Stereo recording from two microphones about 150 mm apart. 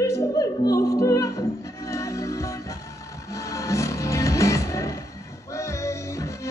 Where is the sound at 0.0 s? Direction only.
20° left (ahead or behind).